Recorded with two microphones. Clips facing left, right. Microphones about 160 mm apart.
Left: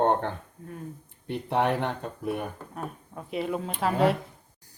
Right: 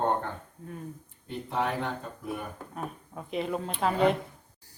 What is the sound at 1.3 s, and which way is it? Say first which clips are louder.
Speech: left 5 dB; 70° left (ahead or behind).